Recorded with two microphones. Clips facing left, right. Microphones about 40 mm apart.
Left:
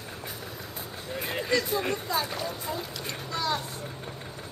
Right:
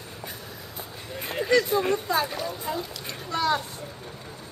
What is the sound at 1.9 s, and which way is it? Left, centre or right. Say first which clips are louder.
Speech: right 4 dB; right.